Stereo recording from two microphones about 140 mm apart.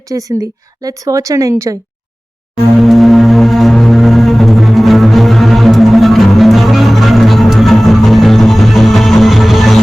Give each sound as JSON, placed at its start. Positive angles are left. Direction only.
{"t": 0.1, "sound": "speech", "side_deg": -25}
{"t": 2.8, "sound": "music", "side_deg": 0}